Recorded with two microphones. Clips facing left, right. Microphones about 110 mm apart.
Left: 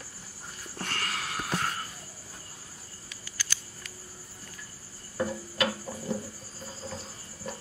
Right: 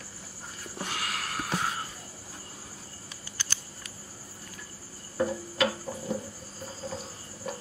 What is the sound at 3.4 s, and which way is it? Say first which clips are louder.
Cricket: left 1 dB; 25° right (ahead or behind).